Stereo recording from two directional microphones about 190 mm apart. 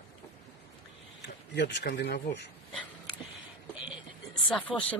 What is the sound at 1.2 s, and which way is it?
Speech, 65° left (ahead or behind).